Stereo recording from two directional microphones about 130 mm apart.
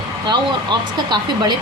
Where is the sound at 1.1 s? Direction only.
35° right (ahead or behind).